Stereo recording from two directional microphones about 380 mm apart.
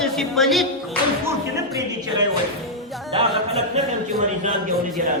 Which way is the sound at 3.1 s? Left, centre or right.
Centre.